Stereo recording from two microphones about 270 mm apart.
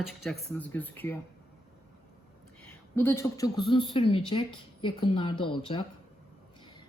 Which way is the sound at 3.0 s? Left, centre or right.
Centre.